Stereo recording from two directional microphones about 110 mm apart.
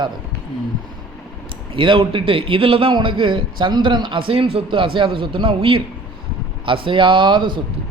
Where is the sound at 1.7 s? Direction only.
50° right (ahead or behind).